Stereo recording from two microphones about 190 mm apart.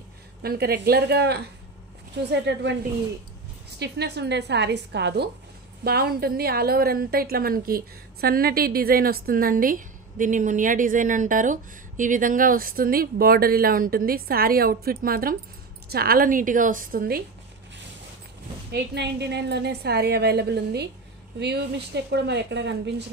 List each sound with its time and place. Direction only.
0.4 s a woman's voice: 55° right (ahead or behind)
3.8 s a woman's voice: 60° right (ahead or behind)
18.7 s a woman's voice: 60° right (ahead or behind)